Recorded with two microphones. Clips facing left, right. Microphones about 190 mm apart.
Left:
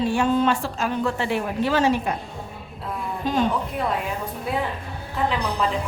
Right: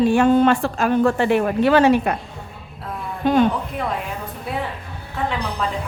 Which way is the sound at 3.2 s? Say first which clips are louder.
Right 7 dB; 60° right (ahead or behind).